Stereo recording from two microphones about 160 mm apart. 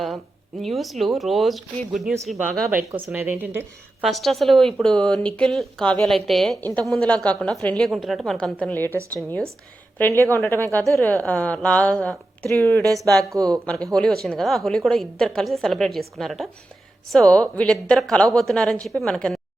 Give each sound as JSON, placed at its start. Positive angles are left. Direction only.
{"t": 0.6, "sound": "a woman's voice", "side_deg": 0}
{"t": 3.1, "sound": "speech", "side_deg": -10}
{"t": 4.0, "sound": "a woman's voice", "side_deg": 0}
{"t": 10.0, "sound": "a woman's voice", "side_deg": 15}
{"t": 12.8, "sound": "speech", "side_deg": -20}
{"t": 13.9, "sound": "a woman's voice", "side_deg": 5}